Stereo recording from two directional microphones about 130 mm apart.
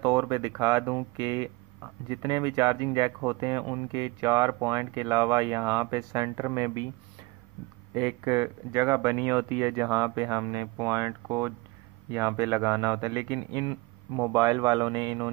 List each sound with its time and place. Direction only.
0.0 s speech: 30° right (ahead or behind)
7.9 s speech: 30° right (ahead or behind)